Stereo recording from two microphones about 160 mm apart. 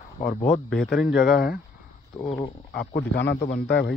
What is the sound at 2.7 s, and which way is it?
Speech, 80° left.